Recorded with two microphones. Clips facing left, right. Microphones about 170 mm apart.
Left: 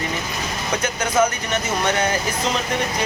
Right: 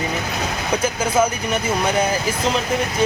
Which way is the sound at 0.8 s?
10° right (ahead or behind).